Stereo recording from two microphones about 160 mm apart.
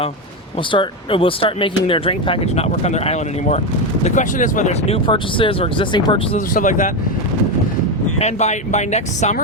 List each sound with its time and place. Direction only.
0.7 s speech: 30° left (ahead or behind); by 4.9 s 50° left (ahead or behind)
5.0 s speech: 30° left (ahead or behind)
6.5 s speech: 55° left (ahead or behind)
8.2 s speech: 45° left (ahead or behind)